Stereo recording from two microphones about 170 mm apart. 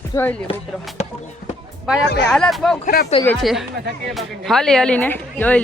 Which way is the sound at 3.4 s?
Centre (ahead or behind).